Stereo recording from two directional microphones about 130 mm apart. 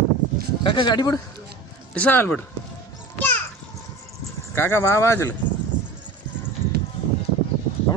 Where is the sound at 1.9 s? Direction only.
10° left (ahead or behind).